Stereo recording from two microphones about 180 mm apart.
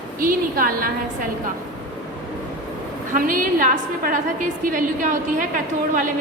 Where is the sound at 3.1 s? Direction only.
50° right (ahead or behind).